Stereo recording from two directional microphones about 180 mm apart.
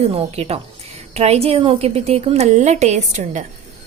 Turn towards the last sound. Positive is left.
turn(degrees=-40)  # may be behind; listen again after turning